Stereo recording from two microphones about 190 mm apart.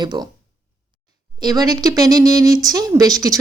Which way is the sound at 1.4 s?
20° right (ahead or behind).